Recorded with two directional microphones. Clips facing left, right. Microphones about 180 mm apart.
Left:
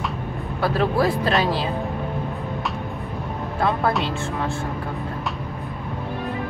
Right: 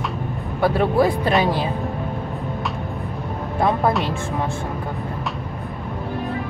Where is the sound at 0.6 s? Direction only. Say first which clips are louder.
Right 3 dB; 15° right (ahead or behind).